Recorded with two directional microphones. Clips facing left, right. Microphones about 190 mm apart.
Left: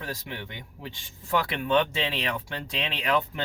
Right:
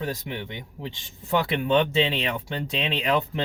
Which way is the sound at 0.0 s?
20° right (ahead or behind).